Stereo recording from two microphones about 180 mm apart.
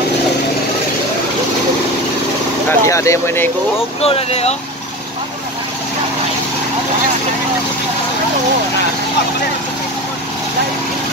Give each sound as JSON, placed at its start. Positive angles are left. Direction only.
{"t": 2.7, "sound": "speech", "side_deg": 15}
{"t": 4.0, "sound": "speech", "side_deg": 35}